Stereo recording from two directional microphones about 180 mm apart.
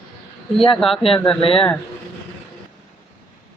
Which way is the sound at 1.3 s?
30° left (ahead or behind).